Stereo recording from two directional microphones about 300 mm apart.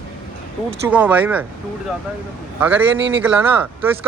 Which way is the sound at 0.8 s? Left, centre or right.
Centre.